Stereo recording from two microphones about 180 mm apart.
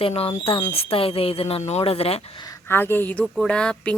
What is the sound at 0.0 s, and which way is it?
Speech, 30° left (ahead or behind).